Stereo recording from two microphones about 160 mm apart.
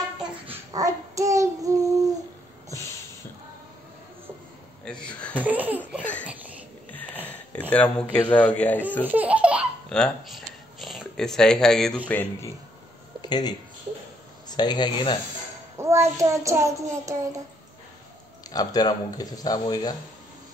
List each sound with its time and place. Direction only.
0.7 s child singing: 20° right (ahead or behind)
4.9 s a sound: 5° left (ahead or behind)
5.3 s babbling: 10° right (ahead or behind)
6.2 s a sound: 10° right (ahead or behind)
7.7 s speech: 10° left (ahead or behind)
9.0 s laughter: 10° right (ahead or behind)
9.8 s a sound: 5° left (ahead or behind)
12.1 s speech: 10° left (ahead or behind)
13.2 s speech: 25° left (ahead or behind)
15.8 s child singing: 15° right (ahead or behind)
18.5 s speech: 25° left (ahead or behind)